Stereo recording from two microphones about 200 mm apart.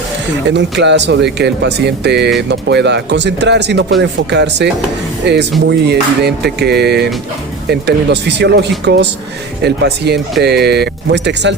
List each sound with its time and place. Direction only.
0.4 s music: 60° right (ahead or behind)